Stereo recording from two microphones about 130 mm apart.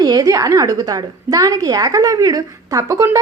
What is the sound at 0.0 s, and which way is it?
A woman's voice, 30° right (ahead or behind).